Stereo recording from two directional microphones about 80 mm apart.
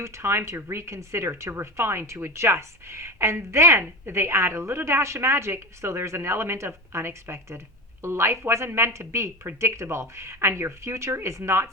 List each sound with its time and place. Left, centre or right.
0.0 s speech: right